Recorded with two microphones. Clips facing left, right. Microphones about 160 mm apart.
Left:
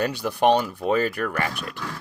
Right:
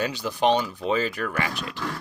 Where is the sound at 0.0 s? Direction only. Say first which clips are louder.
Left 3 dB; 60° left (ahead or behind).